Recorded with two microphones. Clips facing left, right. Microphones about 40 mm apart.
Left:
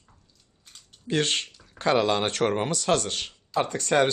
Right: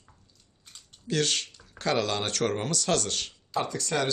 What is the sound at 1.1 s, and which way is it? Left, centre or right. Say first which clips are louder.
Speech: left 2 dB; left.